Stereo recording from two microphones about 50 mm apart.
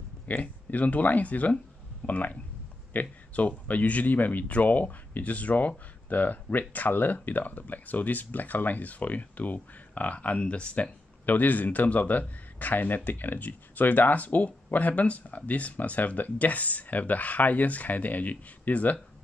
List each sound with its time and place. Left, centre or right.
0.3 s speech: left